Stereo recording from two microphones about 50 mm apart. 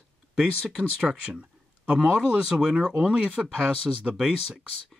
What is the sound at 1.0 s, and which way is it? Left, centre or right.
Speech, right.